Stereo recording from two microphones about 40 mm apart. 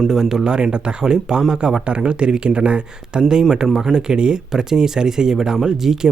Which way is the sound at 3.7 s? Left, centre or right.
Centre.